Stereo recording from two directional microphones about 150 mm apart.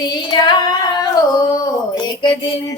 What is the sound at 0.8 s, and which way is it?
Female singing, 25° left (ahead or behind).